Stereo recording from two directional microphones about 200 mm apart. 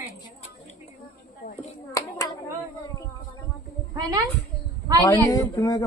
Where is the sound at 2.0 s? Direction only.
15° left (ahead or behind).